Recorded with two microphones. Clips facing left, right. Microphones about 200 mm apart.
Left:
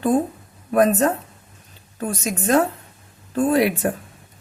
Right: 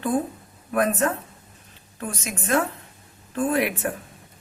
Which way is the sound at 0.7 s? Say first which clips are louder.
Left 5 dB; 35° left (ahead or behind).